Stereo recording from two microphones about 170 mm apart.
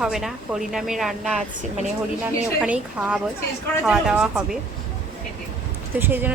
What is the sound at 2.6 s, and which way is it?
A woman's voice, 5° right (ahead or behind).